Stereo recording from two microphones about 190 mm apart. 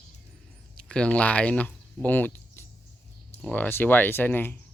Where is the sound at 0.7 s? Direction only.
5° left (ahead or behind).